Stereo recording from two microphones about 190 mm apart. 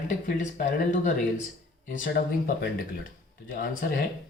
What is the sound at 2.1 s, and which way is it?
Speech, 55° left (ahead or behind).